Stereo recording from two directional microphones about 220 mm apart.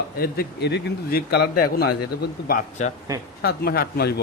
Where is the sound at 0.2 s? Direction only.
45° left (ahead or behind).